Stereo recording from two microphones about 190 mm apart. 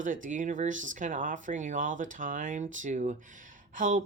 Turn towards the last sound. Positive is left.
turn(degrees=-40)  # may be behind; listen again after turning